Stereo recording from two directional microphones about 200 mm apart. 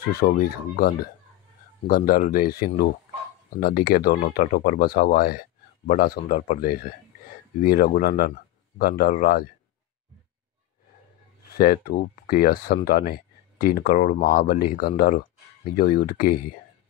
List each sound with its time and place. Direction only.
0.2 s speech: 50° left (ahead or behind)
11.5 s speech: 45° left (ahead or behind)